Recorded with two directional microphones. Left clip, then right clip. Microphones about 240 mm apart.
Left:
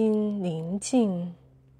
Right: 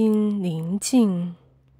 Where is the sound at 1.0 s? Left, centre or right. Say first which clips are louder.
Right 4 dB; right.